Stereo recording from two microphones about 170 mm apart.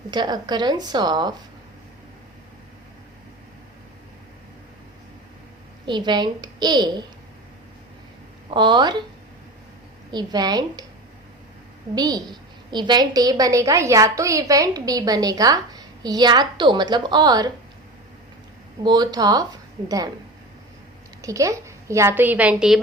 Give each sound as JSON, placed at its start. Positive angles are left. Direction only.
{"t": 0.1, "sound": "a woman's voice", "side_deg": -25}
{"t": 5.8, "sound": "a woman's voice", "side_deg": -25}
{"t": 8.4, "sound": "a woman's voice", "side_deg": -25}
{"t": 10.1, "sound": "a woman's voice", "side_deg": -25}
{"t": 11.9, "sound": "a woman's voice", "side_deg": -25}
{"t": 18.8, "sound": "a woman's voice", "side_deg": -25}
{"t": 21.2, "sound": "a woman's voice", "side_deg": -20}